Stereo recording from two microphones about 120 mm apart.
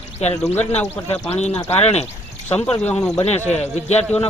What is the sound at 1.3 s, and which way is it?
Speech, 65° left (ahead or behind).